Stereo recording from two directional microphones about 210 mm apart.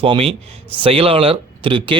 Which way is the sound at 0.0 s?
25° right (ahead or behind).